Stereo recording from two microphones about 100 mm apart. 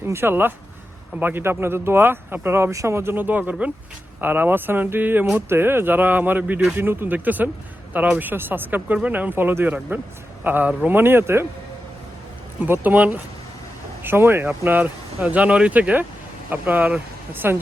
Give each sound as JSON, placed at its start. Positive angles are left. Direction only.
{"t": 0.0, "sound": "speech", "side_deg": -25}
{"t": 12.6, "sound": "speech", "side_deg": -20}